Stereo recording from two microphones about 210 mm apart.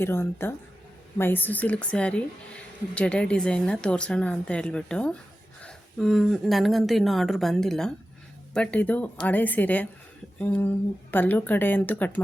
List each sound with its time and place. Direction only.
0.0 s a woman's voice: 10° left (ahead or behind)